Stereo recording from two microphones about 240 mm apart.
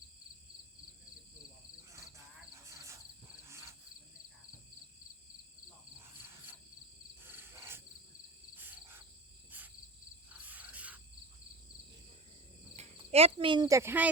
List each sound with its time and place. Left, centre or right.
1.9 s a sound: centre
3.4 s cricket: centre
6.0 s cricket: centre
12.7 s speech: right; by 14.1 s centre